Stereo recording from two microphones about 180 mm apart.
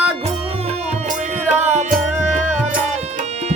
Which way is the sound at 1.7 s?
40° right (ahead or behind).